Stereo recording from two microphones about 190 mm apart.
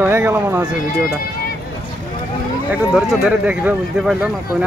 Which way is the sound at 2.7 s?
5° right (ahead or behind).